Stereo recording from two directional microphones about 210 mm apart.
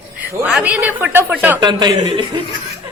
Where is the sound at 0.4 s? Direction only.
5° right (ahead or behind).